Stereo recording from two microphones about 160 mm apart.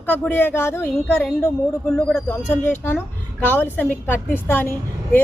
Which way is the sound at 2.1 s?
15° left (ahead or behind).